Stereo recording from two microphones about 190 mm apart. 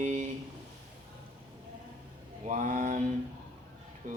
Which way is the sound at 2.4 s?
45° right (ahead or behind).